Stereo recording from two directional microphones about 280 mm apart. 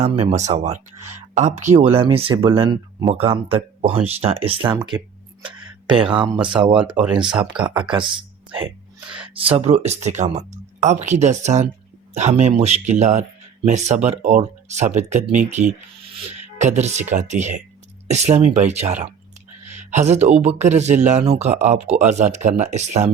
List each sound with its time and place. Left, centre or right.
0.0 s speech: right
6.7 s speech: centre
7.7 s speech: centre